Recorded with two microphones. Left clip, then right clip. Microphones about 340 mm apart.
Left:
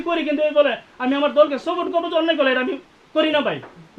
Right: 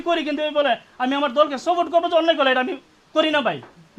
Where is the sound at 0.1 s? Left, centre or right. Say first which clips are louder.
Left 2 dB; centre.